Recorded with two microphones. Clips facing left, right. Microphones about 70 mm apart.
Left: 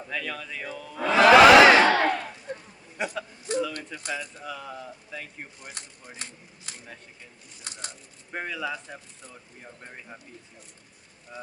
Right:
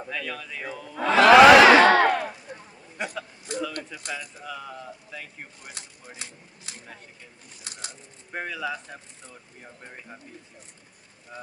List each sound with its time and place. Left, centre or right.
0.1 s speech: centre
1.0 s crowd: centre
1.8 s battle cry: right
3.2 s a sound: centre
3.8 s speech: centre